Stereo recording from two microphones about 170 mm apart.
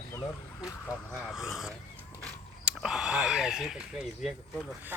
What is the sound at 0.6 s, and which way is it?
Speech, 15° left (ahead or behind).